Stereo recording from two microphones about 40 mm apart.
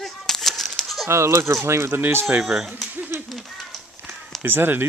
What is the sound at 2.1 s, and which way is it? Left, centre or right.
Speech, right.